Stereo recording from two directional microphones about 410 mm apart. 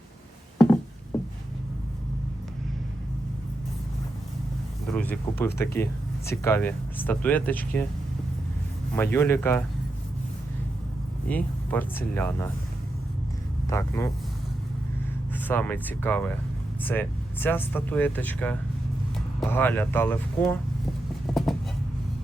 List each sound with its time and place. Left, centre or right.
4.9 s a sound: centre
5.5 s speech: centre
9.0 s speech: centre
11.3 s speech: centre
13.7 s speech: centre
15.4 s speech: centre
21.3 s a sound: centre